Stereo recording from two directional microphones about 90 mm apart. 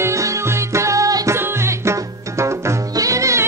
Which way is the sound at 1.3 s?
30° right (ahead or behind).